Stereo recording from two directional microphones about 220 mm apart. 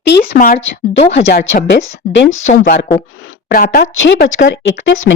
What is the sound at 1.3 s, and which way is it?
Speech, 60° left (ahead or behind).